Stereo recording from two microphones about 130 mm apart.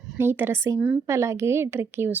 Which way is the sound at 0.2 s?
15° right (ahead or behind).